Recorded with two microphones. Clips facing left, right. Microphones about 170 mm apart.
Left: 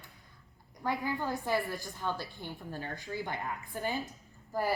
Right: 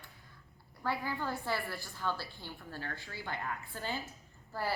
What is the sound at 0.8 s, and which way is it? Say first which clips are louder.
A woman's voice: left 3 dB; 15° left (ahead or behind).